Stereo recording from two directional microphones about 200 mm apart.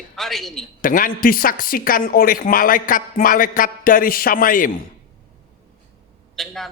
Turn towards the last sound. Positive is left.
turn(degrees=0)  # may be behind; listen again after turning